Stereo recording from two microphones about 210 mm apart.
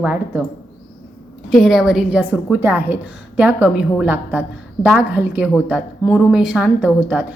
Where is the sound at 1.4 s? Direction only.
Centre (ahead or behind).